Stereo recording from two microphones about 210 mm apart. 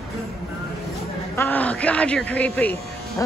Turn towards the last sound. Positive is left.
turn(degrees=10)  # may be behind; listen again after turning